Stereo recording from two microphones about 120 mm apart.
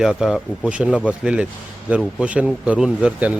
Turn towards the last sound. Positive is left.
turn(degrees=-10)  # may be behind; listen again after turning